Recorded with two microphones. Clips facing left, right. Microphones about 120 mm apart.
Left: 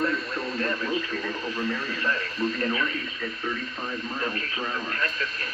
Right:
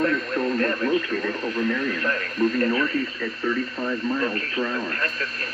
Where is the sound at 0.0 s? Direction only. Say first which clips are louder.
Right 5 dB; 50° right (ahead or behind).